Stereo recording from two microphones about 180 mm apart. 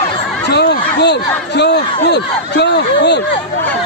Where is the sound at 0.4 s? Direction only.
70° left (ahead or behind).